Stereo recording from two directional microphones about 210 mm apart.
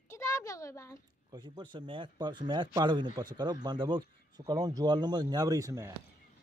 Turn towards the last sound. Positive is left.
turn(degrees=-15)  # may be behind; listen again after turning